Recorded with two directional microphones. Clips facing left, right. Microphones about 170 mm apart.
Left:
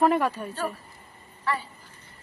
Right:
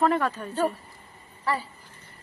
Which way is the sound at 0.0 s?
15° left (ahead or behind).